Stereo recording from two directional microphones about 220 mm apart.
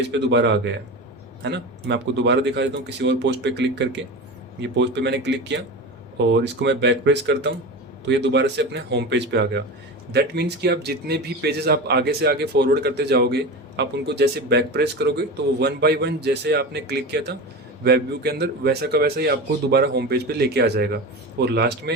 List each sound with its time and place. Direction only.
0.1 s a man's voice: 55° right (ahead or behind)